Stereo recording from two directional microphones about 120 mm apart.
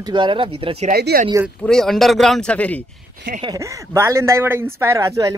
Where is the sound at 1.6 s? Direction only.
5° left (ahead or behind).